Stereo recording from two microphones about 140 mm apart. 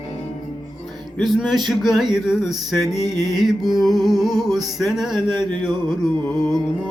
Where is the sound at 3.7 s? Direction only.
Centre (ahead or behind).